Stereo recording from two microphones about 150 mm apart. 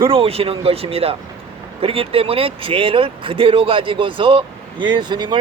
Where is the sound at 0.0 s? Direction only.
40° right (ahead or behind).